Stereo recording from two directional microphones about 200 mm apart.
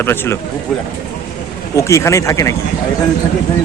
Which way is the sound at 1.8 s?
15° left (ahead or behind).